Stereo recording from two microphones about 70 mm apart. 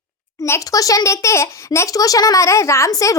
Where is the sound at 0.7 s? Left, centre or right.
Left.